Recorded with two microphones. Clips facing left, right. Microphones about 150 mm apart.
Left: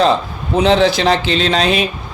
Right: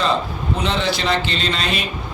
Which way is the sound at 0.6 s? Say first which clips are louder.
Left 10 dB; 90° left.